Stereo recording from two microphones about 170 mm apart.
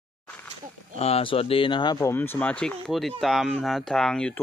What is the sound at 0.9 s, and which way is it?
Speech, 35° left (ahead or behind).